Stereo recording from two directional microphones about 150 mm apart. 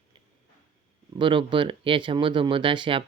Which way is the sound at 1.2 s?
35° right (ahead or behind).